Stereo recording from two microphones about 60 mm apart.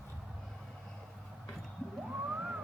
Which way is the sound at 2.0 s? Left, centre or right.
Right.